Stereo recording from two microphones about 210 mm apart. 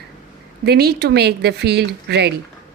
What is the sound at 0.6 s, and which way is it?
A woman's voice, 50° right (ahead or behind).